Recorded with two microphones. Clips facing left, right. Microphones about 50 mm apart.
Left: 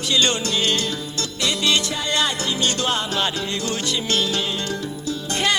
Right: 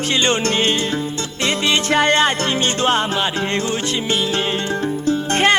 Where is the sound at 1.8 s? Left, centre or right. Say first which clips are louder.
Right 9 dB; right.